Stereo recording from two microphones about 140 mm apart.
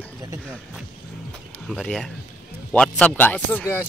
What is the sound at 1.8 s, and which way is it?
Speech, 5° left (ahead or behind).